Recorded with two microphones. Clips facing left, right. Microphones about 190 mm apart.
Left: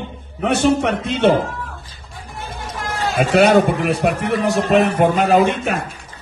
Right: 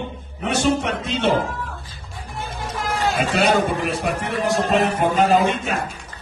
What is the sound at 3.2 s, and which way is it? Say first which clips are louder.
A man's voice: left 8 dB; 60° left (ahead or behind).